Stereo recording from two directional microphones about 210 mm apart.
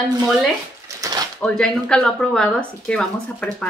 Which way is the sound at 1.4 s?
5° left (ahead or behind).